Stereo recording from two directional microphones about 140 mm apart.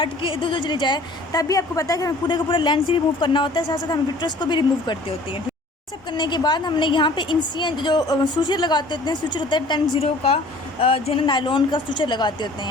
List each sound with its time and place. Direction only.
0.0 s a woman's voice: 40° left (ahead or behind)